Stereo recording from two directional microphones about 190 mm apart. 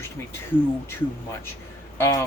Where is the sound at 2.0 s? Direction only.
15° left (ahead or behind).